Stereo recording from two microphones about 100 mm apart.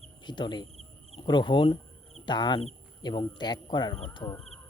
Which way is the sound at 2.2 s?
50° left (ahead or behind).